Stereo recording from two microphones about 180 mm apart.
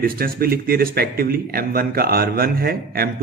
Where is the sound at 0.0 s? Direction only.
55° right (ahead or behind).